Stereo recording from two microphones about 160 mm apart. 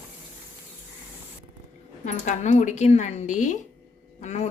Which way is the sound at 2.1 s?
45° left (ahead or behind).